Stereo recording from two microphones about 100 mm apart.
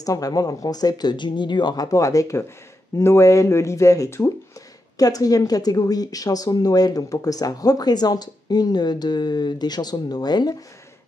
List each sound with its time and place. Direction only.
0.0 s speech: 35° left (ahead or behind)